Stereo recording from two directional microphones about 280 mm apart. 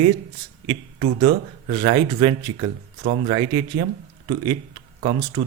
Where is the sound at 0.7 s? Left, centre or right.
Centre.